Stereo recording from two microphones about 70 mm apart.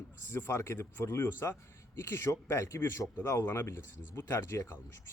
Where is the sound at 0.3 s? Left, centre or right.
Left.